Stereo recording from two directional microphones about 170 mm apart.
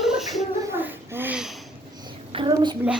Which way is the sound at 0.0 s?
Centre (ahead or behind).